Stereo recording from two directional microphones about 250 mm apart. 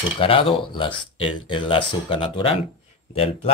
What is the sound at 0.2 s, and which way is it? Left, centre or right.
Speech, left.